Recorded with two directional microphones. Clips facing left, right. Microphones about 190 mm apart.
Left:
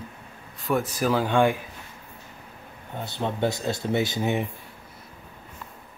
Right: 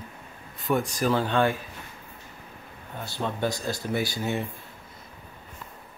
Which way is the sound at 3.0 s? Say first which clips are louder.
Left 3 dB; 20° left (ahead or behind).